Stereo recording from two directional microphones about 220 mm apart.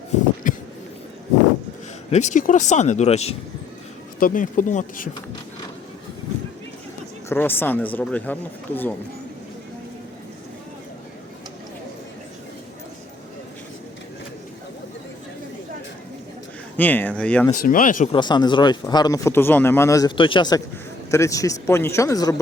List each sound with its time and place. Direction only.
0.4 s a sound: 40° left (ahead or behind)
2.0 s speech: 30° left (ahead or behind)
7.3 s speech: 10° left (ahead or behind)
16.7 s speech: 10° left (ahead or behind)
17.5 s speech: 40° left (ahead or behind)
18.1 s speech: 20° left (ahead or behind)